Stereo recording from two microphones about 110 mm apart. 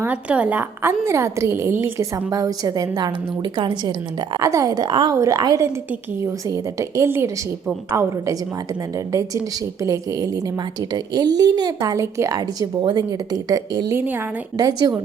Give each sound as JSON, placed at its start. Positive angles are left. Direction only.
{"t": 0.0, "sound": "a woman's voice", "side_deg": -15}
{"t": 2.3, "sound": "a woman's voice", "side_deg": -35}
{"t": 5.1, "sound": "a woman's voice", "side_deg": -30}
{"t": 9.8, "sound": "a woman's voice", "side_deg": -30}
{"t": 13.9, "sound": "a woman's voice", "side_deg": -15}
{"t": 14.6, "sound": "a woman's voice", "side_deg": -35}